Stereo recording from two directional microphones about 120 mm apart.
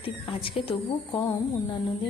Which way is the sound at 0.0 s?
50° left (ahead or behind).